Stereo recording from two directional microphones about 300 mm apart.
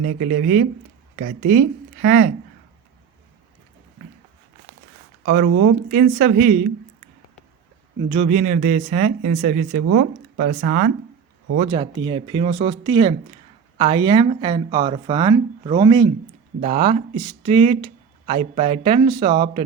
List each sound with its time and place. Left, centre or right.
0.2 s speech: right
5.2 s speech: right
8.1 s speech: right
11.7 s speech: centre